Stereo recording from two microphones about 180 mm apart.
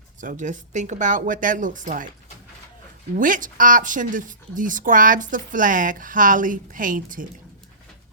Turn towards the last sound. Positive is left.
turn(degrees=-50)  # may be behind; listen again after turning